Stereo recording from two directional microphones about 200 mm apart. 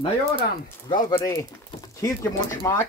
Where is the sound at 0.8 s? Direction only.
20° left (ahead or behind).